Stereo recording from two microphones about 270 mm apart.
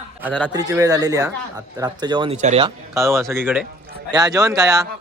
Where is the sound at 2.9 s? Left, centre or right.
Centre.